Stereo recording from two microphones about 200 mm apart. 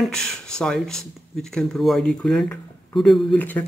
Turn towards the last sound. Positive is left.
turn(degrees=10)  # may be behind; listen again after turning